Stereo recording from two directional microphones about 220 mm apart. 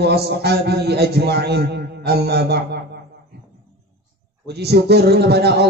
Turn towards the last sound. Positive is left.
turn(degrees=-50)  # may be behind; listen again after turning